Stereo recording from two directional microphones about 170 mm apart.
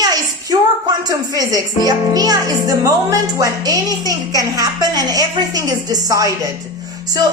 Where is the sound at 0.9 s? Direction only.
20° right (ahead or behind).